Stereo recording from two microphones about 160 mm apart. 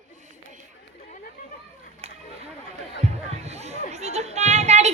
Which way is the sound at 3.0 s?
40° right (ahead or behind).